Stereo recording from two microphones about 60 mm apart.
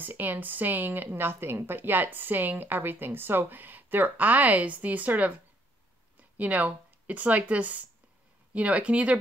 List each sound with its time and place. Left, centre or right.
0.0 s a woman's voice: right
6.3 s speech: right